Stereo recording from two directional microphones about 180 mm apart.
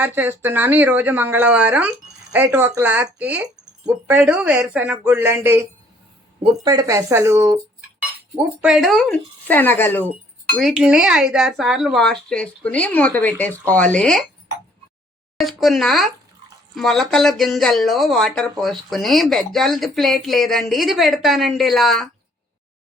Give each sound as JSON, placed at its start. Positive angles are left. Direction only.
{"t": 0.0, "sound": "speech", "side_deg": -10}
{"t": 8.4, "sound": "speech", "side_deg": 0}
{"t": 10.6, "sound": "speech", "side_deg": -5}
{"t": 15.4, "sound": "speech", "side_deg": 0}